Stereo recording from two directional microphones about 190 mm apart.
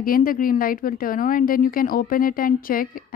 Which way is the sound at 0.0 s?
50° left (ahead or behind).